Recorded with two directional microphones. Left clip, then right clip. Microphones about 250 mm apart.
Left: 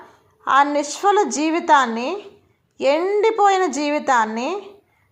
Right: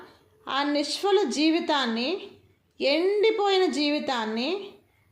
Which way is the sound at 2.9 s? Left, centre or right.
Left.